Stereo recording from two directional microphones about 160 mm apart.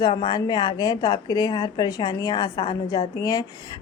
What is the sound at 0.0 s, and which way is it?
A woman's voice, 30° left (ahead or behind).